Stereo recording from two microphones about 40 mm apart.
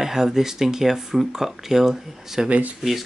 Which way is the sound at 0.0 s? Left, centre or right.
Centre.